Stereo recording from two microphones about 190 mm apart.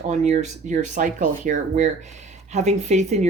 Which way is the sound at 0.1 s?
40° right (ahead or behind).